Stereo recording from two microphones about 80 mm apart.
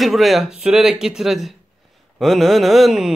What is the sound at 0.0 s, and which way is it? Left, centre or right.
Speech, centre.